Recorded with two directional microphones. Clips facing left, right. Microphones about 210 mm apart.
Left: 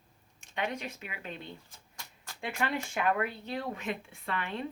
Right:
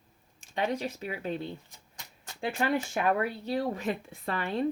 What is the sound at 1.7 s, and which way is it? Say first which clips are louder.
Typewriter: even; 20° right (ahead or behind).